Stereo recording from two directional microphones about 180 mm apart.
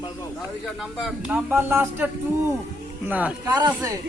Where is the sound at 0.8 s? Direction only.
5° right (ahead or behind).